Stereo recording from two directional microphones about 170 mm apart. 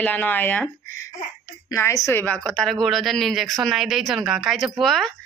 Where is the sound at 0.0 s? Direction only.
10° left (ahead or behind).